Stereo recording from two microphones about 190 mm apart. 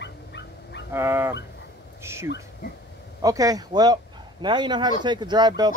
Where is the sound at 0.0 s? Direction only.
65° left (ahead or behind).